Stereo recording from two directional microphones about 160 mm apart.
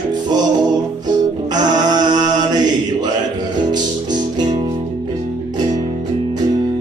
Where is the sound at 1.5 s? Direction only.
25° right (ahead or behind).